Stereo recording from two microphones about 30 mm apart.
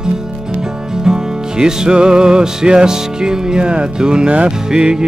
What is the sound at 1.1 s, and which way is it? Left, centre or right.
Music, right.